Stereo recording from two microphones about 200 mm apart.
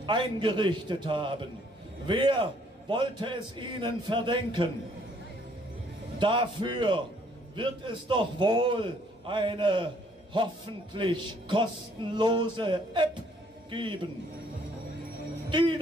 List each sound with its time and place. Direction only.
0.0 s a man's voice: 25° right (ahead or behind)
6.1 s a man's voice: 25° right (ahead or behind)
15.5 s a man's voice: 25° right (ahead or behind)